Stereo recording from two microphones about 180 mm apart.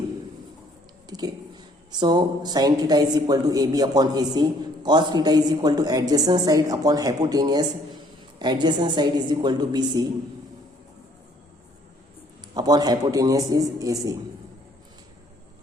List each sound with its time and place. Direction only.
1.0 s speech: 20° right (ahead or behind)
12.5 s speech: 20° right (ahead or behind)